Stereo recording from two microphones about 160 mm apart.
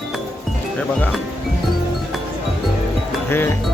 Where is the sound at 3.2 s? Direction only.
15° left (ahead or behind).